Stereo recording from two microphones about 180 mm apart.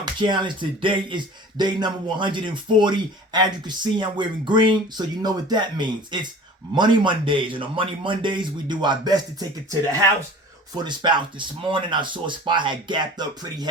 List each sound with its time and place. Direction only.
0.0 s speech: 25° right (ahead or behind)